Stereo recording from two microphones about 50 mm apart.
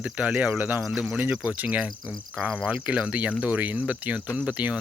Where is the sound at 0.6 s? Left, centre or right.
Right.